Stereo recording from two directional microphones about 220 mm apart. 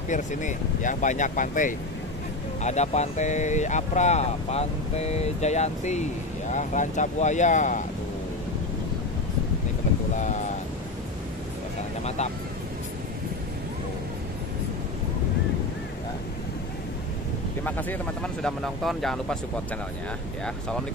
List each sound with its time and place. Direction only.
0.1 s speech: 35° left (ahead or behind)
10.1 s speech: 35° left (ahead or behind)
17.6 s speech: 10° left (ahead or behind)